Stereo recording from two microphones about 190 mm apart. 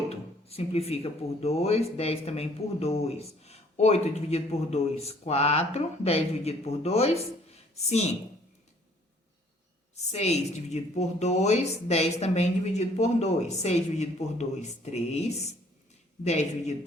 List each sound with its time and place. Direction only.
0.1 s speech: 35° left (ahead or behind)
9.9 s speech: 35° left (ahead or behind)